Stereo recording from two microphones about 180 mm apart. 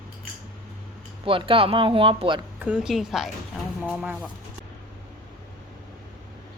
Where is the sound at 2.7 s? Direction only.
5° right (ahead or behind).